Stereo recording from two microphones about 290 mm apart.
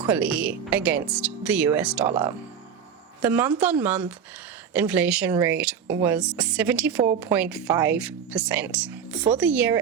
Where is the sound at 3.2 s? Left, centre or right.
Centre.